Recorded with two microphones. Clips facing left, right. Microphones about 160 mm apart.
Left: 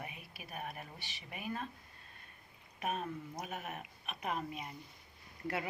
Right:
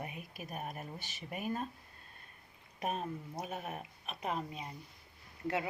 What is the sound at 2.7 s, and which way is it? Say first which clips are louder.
A woman's voice: right 1 dB; 35° right (ahead or behind).